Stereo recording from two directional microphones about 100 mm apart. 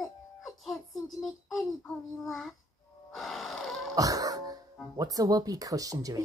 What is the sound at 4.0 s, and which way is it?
Music, 35° right (ahead or behind).